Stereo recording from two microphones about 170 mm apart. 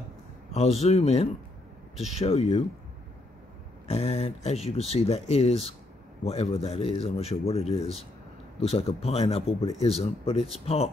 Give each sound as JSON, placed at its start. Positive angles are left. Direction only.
{"t": 0.5, "sound": "speech", "side_deg": 40}
{"t": 3.8, "sound": "speech", "side_deg": 40}